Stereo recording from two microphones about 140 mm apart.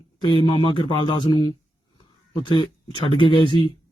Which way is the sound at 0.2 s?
35° left (ahead or behind).